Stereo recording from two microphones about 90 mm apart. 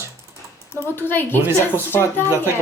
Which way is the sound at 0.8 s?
25° left (ahead or behind).